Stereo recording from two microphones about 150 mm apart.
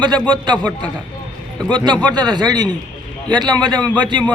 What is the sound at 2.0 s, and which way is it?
A man's voice, 30° right (ahead or behind).